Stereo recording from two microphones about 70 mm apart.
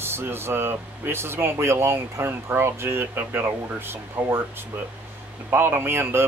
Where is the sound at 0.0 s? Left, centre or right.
Right.